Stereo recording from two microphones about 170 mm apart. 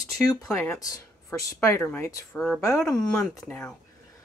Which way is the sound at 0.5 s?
20° left (ahead or behind).